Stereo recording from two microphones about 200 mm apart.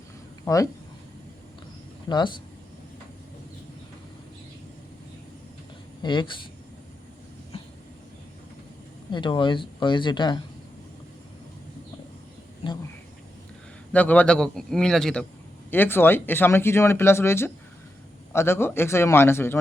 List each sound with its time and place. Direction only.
0.4 s speech: 15° left (ahead or behind)
2.0 s speech: 20° left (ahead or behind)
6.0 s speech: 25° left (ahead or behind)
9.1 s speech: 25° left (ahead or behind)
12.6 s duck: 30° left (ahead or behind)
13.9 s a man's voice: 5° left (ahead or behind)